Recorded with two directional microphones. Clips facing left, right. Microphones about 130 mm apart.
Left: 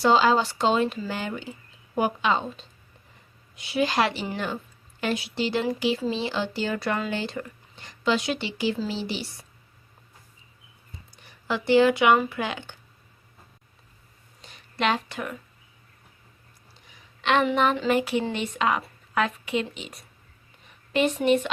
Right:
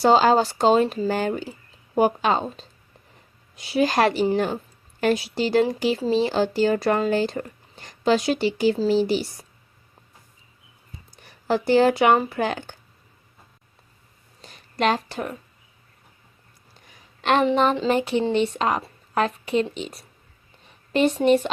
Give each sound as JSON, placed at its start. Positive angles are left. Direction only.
{"t": 0.0, "sound": "a woman's voice", "side_deg": -45}
{"t": 11.2, "sound": "speech", "side_deg": -40}
{"t": 14.4, "sound": "a sound", "side_deg": -40}
{"t": 17.2, "sound": "a woman's voice", "side_deg": -45}
{"t": 17.4, "sound": "a woman's voice", "side_deg": -30}